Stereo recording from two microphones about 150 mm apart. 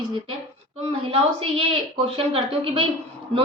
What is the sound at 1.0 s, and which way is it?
A woman's voice, 40° right (ahead or behind).